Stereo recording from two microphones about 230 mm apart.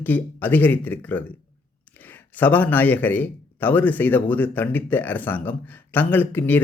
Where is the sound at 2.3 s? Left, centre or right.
Centre.